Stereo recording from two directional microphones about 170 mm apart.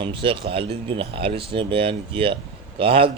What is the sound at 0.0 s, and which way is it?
Speech, 30° right (ahead or behind).